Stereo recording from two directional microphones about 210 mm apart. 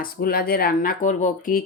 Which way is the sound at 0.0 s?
45° left (ahead or behind).